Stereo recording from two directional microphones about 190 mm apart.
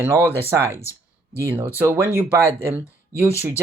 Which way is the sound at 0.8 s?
15° left (ahead or behind).